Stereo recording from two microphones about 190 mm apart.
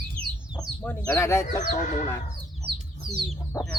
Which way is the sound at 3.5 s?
15° left (ahead or behind).